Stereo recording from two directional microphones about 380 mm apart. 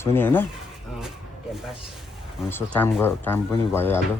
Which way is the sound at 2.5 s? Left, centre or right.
Centre.